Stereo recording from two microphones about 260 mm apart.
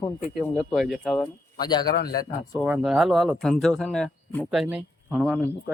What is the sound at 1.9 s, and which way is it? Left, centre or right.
Speech, left.